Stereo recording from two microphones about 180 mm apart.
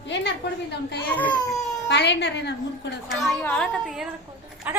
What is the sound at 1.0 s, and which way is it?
Speech, 10° left (ahead or behind).